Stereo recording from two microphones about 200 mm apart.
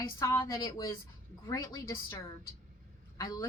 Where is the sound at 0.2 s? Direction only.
15° left (ahead or behind).